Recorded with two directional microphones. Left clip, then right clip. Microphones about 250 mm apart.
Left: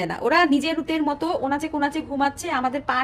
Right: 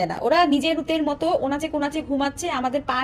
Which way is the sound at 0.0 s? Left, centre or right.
Left.